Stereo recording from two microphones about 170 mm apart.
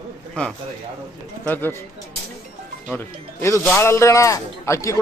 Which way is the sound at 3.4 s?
15° left (ahead or behind).